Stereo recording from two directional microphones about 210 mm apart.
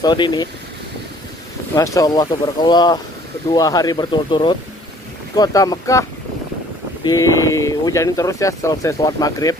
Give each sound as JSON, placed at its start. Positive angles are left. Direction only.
{"t": 0.0, "sound": "speech", "side_deg": 20}
{"t": 1.8, "sound": "speech", "side_deg": 15}
{"t": 7.1, "sound": "speech", "side_deg": 15}